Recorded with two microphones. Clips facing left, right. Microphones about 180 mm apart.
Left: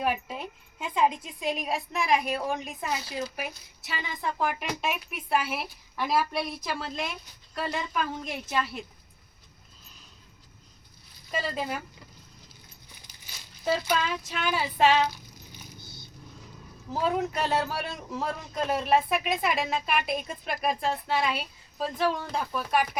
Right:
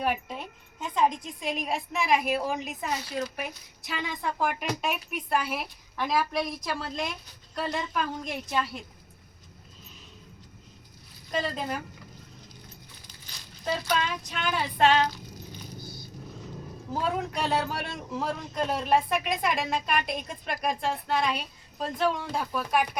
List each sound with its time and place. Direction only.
0.0 s speech: 5° left (ahead or behind)
11.3 s speech: 5° left (ahead or behind)
13.1 s speech: 10° left (ahead or behind)
16.9 s speech: centre (ahead or behind)